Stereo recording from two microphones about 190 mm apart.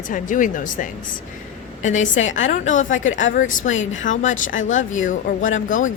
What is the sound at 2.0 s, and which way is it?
Speech, 85° left.